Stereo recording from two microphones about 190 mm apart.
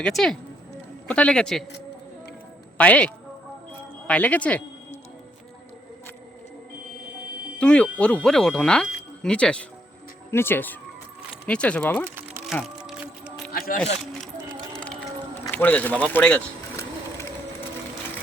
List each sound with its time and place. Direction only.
0.0 s speech: centre (ahead or behind)
2.7 s speech: 5° left (ahead or behind)
7.6 s speech: 5° left (ahead or behind)
12.5 s music: centre (ahead or behind)
13.5 s a sound: 50° left (ahead or behind)
15.4 s bird: 10° left (ahead or behind)